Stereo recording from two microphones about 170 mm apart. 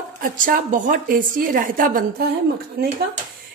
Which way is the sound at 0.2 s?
50° right (ahead or behind).